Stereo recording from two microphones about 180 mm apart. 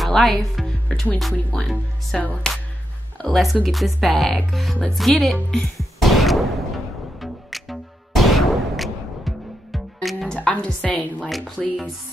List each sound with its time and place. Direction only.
0.0 s music: centre (ahead or behind)
2.4 s speech: 5° left (ahead or behind)
5.9 s a sound: centre (ahead or behind)
7.2 s music: centre (ahead or behind)
11.1 s speech: centre (ahead or behind)